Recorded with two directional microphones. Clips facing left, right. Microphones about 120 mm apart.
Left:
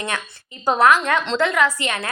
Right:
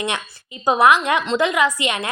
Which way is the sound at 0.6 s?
15° right (ahead or behind).